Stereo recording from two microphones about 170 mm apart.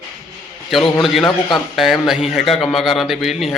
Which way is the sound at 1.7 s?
Centre (ahead or behind).